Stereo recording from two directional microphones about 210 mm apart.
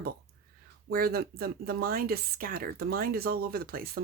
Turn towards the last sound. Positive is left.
turn(degrees=-45)  # may be behind; listen again after turning